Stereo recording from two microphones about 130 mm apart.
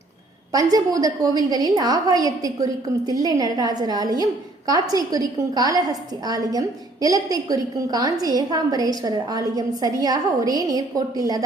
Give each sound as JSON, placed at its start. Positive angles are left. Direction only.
{"t": 0.5, "sound": "a woman's voice", "side_deg": -30}